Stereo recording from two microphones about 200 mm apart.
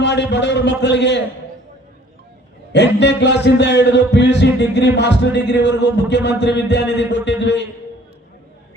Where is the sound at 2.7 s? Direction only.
60° left (ahead or behind).